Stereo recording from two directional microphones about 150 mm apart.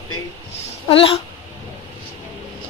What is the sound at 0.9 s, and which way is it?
Speech, 40° left (ahead or behind).